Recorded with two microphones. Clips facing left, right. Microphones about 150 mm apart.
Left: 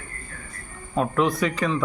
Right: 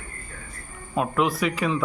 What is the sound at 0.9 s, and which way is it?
Speech, 5° right (ahead or behind).